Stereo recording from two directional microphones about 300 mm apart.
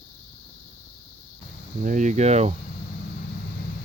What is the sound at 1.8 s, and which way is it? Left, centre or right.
Speech, right.